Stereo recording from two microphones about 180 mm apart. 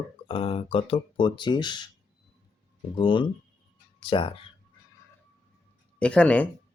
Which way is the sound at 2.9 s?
25° left (ahead or behind).